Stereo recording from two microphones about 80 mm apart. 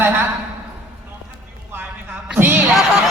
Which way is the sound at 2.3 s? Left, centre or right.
Right.